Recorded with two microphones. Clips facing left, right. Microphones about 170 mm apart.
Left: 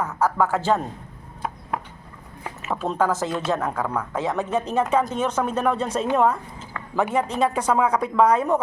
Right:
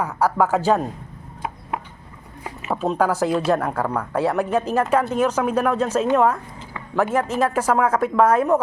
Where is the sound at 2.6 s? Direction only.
10° right (ahead or behind).